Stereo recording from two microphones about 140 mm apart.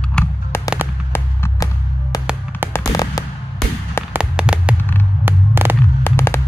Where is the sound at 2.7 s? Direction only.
25° left (ahead or behind).